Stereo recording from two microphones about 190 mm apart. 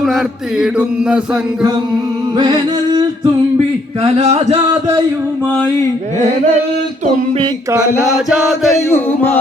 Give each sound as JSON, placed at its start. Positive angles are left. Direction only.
{"t": 0.0, "sound": "chant", "side_deg": 0}
{"t": 2.3, "sound": "singing", "side_deg": -25}
{"t": 4.0, "sound": "a sound", "side_deg": -35}
{"t": 5.5, "sound": "music", "side_deg": 5}
{"t": 7.7, "sound": "chant", "side_deg": -10}
{"t": 8.9, "sound": "music", "side_deg": 10}